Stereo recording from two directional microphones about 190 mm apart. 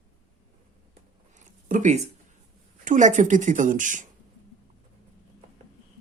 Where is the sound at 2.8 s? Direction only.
40° right (ahead or behind).